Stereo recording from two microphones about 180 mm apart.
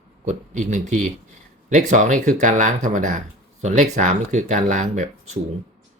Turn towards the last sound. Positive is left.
turn(degrees=-40)  # may be behind; listen again after turning